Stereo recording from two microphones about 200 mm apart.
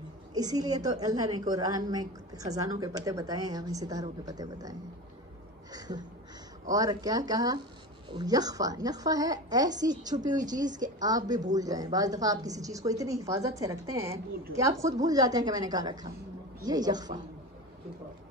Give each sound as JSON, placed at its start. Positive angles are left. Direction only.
{"t": 0.3, "sound": "a woman's voice", "side_deg": -20}
{"t": 5.7, "sound": "a sound", "side_deg": -20}
{"t": 6.7, "sound": "a woman's voice", "side_deg": -20}